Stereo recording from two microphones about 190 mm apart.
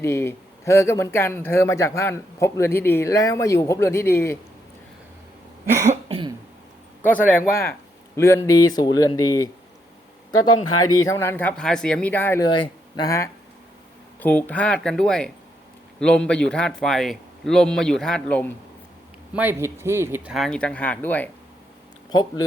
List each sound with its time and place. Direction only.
0.0 s speech: 15° left (ahead or behind)
5.6 s cough: 15° right (ahead or behind)
5.9 s cough: 30° right (ahead or behind)
7.3 s a man's voice: 10° left (ahead or behind)
12.5 s a man's voice: 25° left (ahead or behind); by 18.4 s 5° left (ahead or behind)
19.3 s a man's voice: 10° right (ahead or behind); by 21.2 s 10° left (ahead or behind)
22.1 s speech: 20° left (ahead or behind)